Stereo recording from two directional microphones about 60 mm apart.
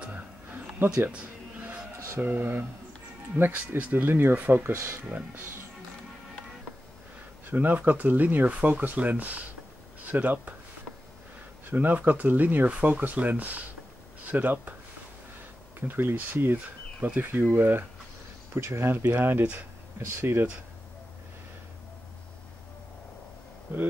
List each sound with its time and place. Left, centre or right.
0.1 s a sound: right
3.3 s speech: right
7.4 s speech: right
11.7 s speech: right
15.8 s speech: right
20.0 s speech: right